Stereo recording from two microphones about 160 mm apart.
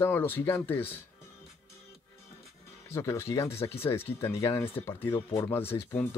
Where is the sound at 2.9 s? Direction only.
15° left (ahead or behind).